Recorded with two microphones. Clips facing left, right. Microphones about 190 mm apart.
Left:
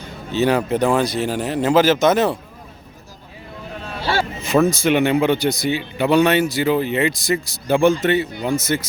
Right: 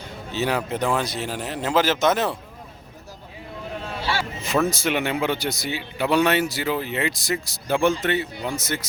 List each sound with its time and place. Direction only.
0.3 s speech: 5° right (ahead or behind)
4.0 s a sound: 45° left (ahead or behind)
4.6 s speech: 5° right (ahead or behind)